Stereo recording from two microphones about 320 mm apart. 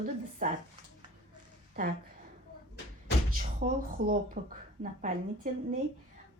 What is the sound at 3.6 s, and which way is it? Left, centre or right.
Speech, right.